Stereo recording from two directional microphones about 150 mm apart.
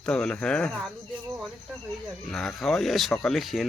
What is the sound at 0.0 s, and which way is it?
Speech, 5° left (ahead or behind).